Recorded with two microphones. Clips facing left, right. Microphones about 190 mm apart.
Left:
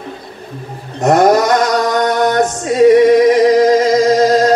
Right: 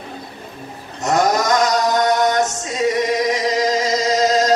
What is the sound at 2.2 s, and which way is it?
Music, 55° left (ahead or behind).